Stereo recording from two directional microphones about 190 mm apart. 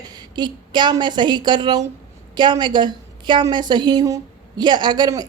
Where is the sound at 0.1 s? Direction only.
20° right (ahead or behind).